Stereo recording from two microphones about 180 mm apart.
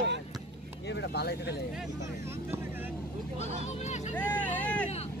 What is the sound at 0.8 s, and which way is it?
Speech, 70° left (ahead or behind).